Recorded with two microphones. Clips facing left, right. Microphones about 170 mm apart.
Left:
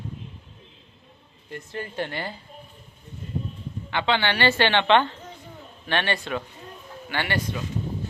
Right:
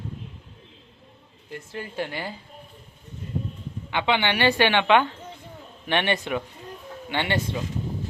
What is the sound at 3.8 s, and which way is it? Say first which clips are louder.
A woman's voice: even; 15° right (ahead or behind).